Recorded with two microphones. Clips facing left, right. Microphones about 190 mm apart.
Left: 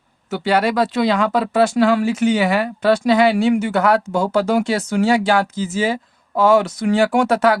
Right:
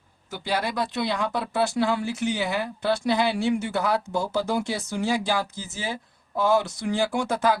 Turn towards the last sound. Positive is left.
turn(degrees=75)  # may be behind; listen again after turning